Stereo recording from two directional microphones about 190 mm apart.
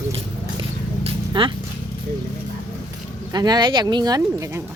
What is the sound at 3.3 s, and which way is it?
Speech, 20° right (ahead or behind).